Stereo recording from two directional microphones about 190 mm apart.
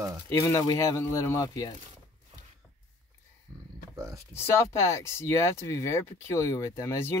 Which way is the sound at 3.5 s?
15° right (ahead or behind).